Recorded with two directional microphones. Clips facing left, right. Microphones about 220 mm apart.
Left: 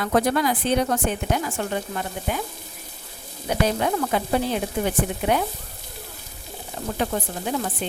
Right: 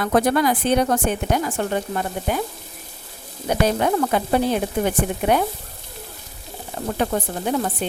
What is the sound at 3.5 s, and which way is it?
Speech, 50° right (ahead or behind).